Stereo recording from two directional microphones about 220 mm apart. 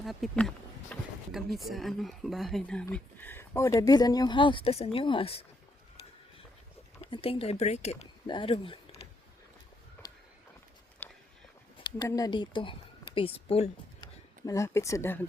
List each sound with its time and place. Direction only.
0.0 s speech: centre (ahead or behind); by 5.5 s 25° left (ahead or behind)
7.0 s speech: 25° left (ahead or behind)
10.0 s a sound: 10° left (ahead or behind)
11.8 s speech: 20° left (ahead or behind)
14.4 s speech: 15° left (ahead or behind)